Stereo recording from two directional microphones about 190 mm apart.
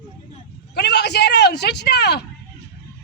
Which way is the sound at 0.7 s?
60° left (ahead or behind).